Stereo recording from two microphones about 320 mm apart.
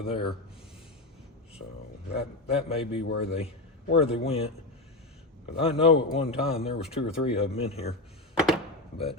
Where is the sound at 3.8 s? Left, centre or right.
Left.